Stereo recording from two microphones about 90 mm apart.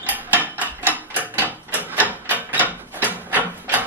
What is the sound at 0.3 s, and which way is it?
Mechanisms, 20° right (ahead or behind).